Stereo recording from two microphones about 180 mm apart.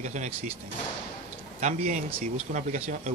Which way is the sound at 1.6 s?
45° right (ahead or behind).